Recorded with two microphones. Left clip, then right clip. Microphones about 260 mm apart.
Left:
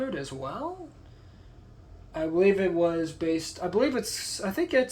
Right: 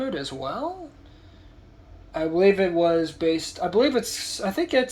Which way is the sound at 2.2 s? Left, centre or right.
Centre.